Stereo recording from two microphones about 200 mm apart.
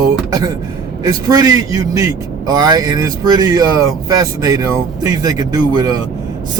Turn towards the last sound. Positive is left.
turn(degrees=-20)  # may be behind; listen again after turning